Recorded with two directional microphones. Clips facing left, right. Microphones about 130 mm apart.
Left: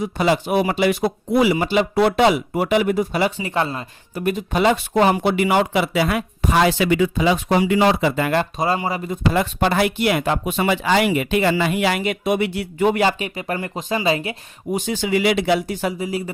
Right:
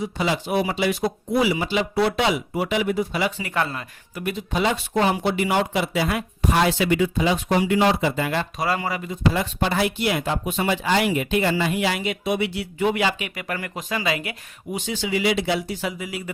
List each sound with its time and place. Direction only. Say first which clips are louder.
0.0 s a man's voice: left 5 dB; 55° left (ahead or behind)
3.3 s speech: left 3 dB; 25° left (ahead or behind)
4.2 s speech: left 5 dB; 45° left (ahead or behind)
8.5 s speech: left 3 dB; 25° left (ahead or behind)
9.0 s speech: left 3 dB; 60° left (ahead or behind); by 14.3 s 30° left (ahead or behind)
14.7 s a man's voice: left 5 dB; 45° left (ahead or behind)
15.9 s speech: left 6 dB; 35° left (ahead or behind)